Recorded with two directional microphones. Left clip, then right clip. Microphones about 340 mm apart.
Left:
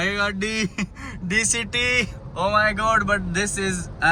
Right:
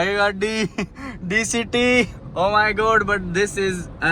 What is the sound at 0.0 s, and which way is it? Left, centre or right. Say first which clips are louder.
A man's voice: right 4 dB; centre.